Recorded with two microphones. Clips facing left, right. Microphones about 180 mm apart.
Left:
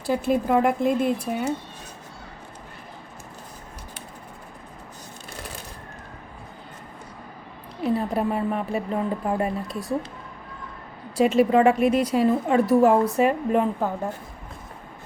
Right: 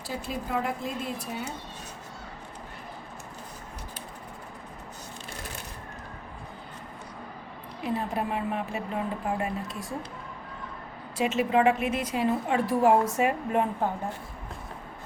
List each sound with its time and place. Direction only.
0.1 s speech: 55° left (ahead or behind)
7.9 s a woman's voice: 40° left (ahead or behind)
11.2 s a woman's voice: 40° left (ahead or behind)